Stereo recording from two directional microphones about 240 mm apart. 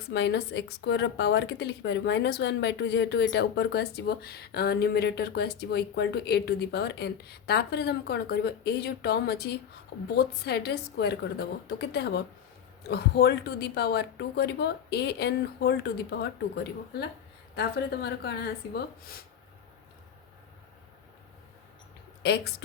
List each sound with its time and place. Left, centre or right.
0.1 s speech: left
17.5 s speech: left
22.2 s speech: left